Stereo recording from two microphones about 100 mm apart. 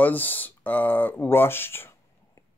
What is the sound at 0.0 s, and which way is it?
Speech, 15° left (ahead or behind).